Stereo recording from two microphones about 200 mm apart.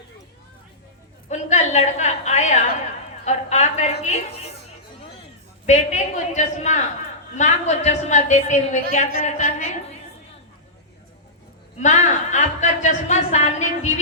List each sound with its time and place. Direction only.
1.3 s speech: 35° left (ahead or behind)
5.6 s speech: 35° left (ahead or behind)
11.8 s speech: 35° left (ahead or behind)